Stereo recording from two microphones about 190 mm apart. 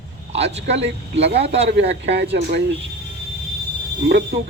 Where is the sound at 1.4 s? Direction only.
30° right (ahead or behind).